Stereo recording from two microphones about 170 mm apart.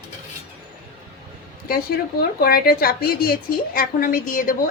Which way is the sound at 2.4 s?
60° left (ahead or behind).